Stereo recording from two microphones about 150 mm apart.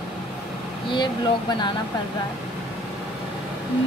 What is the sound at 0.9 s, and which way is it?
Speech, 30° left (ahead or behind).